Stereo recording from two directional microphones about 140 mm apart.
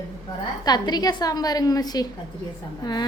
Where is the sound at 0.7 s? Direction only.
30° left (ahead or behind).